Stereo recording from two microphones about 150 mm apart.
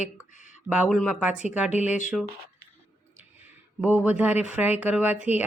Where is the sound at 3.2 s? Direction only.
10° right (ahead or behind).